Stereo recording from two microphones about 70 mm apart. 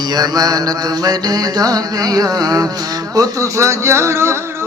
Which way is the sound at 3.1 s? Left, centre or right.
Right.